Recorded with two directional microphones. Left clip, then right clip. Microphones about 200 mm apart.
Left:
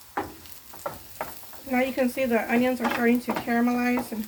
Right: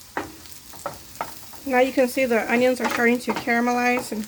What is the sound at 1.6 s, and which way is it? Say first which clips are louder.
Speech: right 6 dB; 65° right (ahead or behind).